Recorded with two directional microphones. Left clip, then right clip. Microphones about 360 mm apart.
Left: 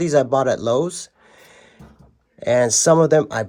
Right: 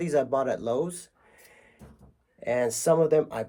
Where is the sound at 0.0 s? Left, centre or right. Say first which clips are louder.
Left 9 dB; left.